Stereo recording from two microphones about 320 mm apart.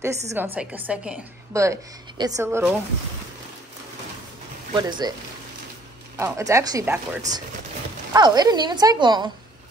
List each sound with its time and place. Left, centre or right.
0.3 s a woman's voice: centre
4.7 s a woman's voice: centre
6.1 s a woman's voice: centre